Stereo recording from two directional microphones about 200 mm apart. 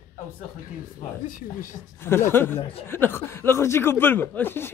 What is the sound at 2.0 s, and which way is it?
Speech, 10° left (ahead or behind).